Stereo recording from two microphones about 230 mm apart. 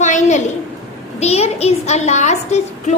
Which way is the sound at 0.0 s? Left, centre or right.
Left.